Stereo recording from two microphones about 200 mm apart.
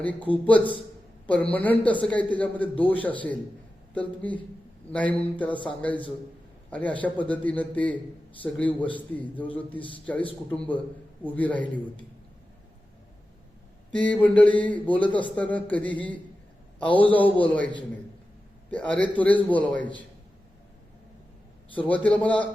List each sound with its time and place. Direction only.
0.0 s a man's voice: 5° left (ahead or behind)
13.9 s a man's voice: 5° left (ahead or behind)
18.7 s a man's voice: 5° left (ahead or behind)
21.8 s a man's voice: 5° left (ahead or behind)